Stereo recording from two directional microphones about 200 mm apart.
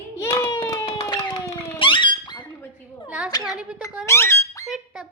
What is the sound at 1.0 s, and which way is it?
Squeak, 20° left (ahead or behind).